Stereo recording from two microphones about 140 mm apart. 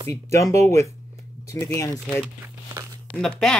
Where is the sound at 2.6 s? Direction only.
25° right (ahead or behind).